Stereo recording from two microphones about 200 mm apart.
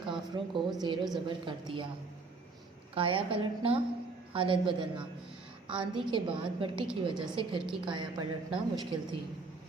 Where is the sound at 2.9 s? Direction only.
25° right (ahead or behind).